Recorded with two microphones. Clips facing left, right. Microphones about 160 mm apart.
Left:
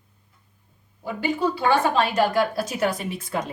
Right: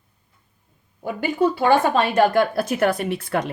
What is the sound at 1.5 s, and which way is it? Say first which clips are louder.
A woman's voice: right 2 dB; 55° right (ahead or behind).